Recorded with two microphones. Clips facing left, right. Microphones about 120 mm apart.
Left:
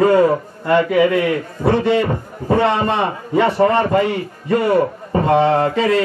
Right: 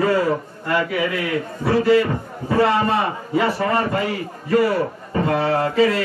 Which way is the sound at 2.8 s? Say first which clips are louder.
Left 2 dB; 5° right (ahead or behind).